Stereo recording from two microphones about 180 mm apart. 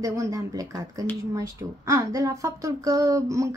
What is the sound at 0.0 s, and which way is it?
Speech, 20° right (ahead or behind).